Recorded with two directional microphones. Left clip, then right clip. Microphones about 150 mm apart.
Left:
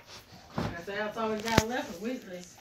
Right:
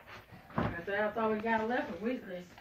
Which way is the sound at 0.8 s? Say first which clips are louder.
Right 1 dB; 25° left (ahead or behind).